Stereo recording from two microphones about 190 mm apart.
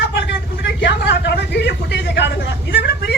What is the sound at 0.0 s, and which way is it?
Vehicle, 60° left (ahead or behind).